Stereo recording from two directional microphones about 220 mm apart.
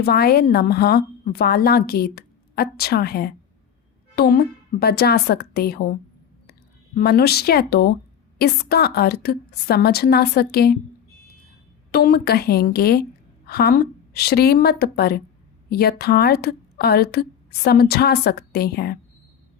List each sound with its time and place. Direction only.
0.0 s a woman's voice: 45° left (ahead or behind)
11.9 s a woman's voice: 45° left (ahead or behind)